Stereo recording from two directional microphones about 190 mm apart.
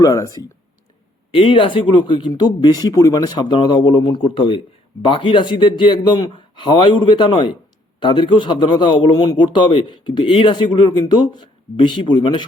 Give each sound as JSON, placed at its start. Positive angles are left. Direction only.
{"t": 0.0, "sound": "speech", "side_deg": 15}
{"t": 1.3, "sound": "a man's voice", "side_deg": 30}